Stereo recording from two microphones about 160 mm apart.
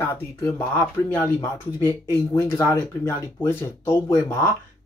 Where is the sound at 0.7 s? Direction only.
15° left (ahead or behind).